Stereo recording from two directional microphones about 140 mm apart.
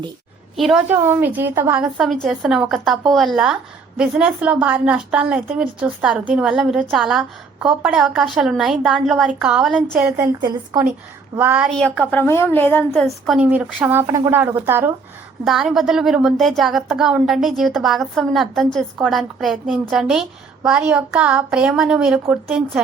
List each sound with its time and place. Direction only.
0.5 s a woman's voice: centre (ahead or behind)
0.9 s a woman's voice: 20° right (ahead or behind); by 9.8 s centre (ahead or behind)
9.9 s a woman's voice: 15° right (ahead or behind)
10.4 s a woman's voice: 30° right (ahead or behind)
11.3 s a woman's voice: 10° right (ahead or behind)
11.7 s a woman's voice: 5° left (ahead or behind)
12.9 s a woman's voice: centre (ahead or behind); by 14.9 s 15° right (ahead or behind)
15.4 s a woman's voice: centre (ahead or behind)